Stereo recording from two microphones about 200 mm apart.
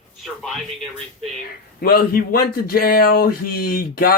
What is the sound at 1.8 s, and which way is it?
Speech, 50° left (ahead or behind).